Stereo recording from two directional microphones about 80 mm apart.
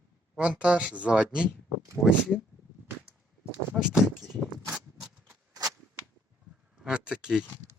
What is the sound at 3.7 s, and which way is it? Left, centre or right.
Speech, centre.